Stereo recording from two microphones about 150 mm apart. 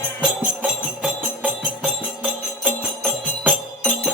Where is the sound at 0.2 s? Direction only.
5° right (ahead or behind).